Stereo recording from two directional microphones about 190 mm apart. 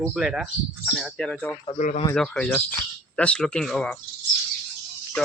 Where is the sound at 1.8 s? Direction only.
40° left (ahead or behind).